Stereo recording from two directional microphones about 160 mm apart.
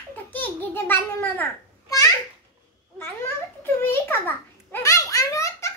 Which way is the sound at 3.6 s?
15° left (ahead or behind).